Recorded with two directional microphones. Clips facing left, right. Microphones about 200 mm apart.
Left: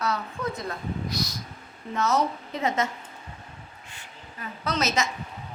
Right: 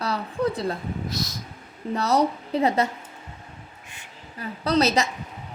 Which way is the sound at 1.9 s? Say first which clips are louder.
Right 3 dB; 35° right (ahead or behind).